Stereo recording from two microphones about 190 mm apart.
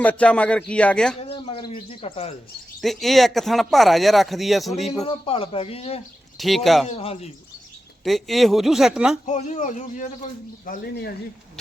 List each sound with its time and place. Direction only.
0.0 s speech: 5° left (ahead or behind)
1.2 s speech: 30° left (ahead or behind)
2.8 s speech: centre (ahead or behind)
5.0 s speech: 30° left (ahead or behind)
6.3 s speech: centre (ahead or behind)
6.9 s speech: 30° left (ahead or behind)
8.0 s speech: centre (ahead or behind)
9.2 s speech: 40° left (ahead or behind)
10.7 s speech: 55° left (ahead or behind)